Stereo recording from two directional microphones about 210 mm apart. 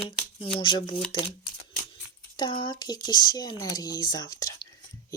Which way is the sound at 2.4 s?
20° left (ahead or behind).